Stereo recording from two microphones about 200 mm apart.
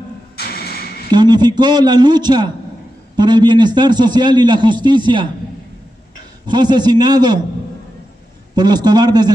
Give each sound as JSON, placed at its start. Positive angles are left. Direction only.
{"t": 0.4, "sound": "a sound", "side_deg": 50}
{"t": 1.1, "sound": "a man's voice", "side_deg": -20}
{"t": 6.4, "sound": "a man's voice", "side_deg": -20}
{"t": 8.5, "sound": "a man's voice", "side_deg": -20}